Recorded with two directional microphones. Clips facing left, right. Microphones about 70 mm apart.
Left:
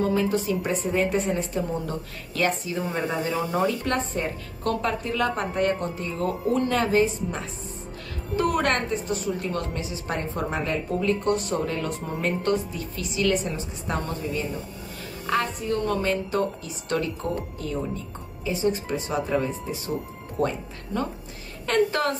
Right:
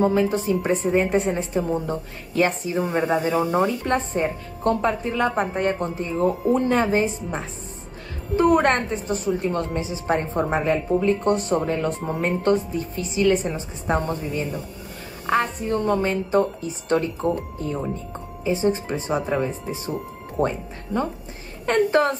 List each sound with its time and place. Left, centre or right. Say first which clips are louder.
0.0 s a woman's voice: right 3 dB; right